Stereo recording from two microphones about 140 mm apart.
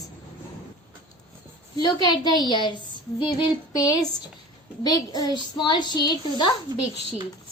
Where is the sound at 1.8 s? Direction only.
30° left (ahead or behind).